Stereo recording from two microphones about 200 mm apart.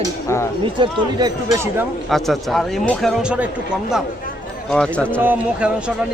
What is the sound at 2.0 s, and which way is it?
Speech, centre (ahead or behind).